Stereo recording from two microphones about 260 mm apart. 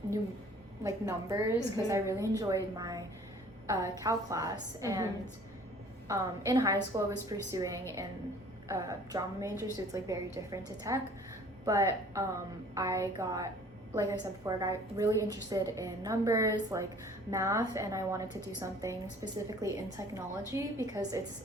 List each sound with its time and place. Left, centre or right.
0.9 s a woman's voice: centre
6.1 s a woman's voice: centre